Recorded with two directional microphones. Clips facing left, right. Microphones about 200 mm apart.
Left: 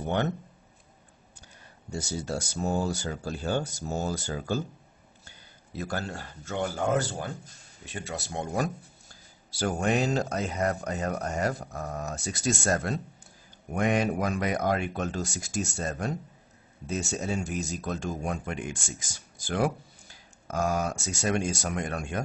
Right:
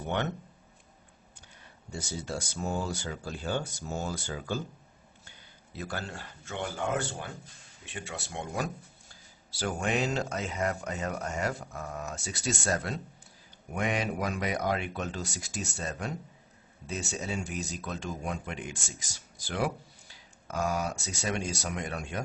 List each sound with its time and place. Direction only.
0.0 s speech: 40° left (ahead or behind)
1.9 s speech: 40° left (ahead or behind)
5.8 s speech: 45° left (ahead or behind)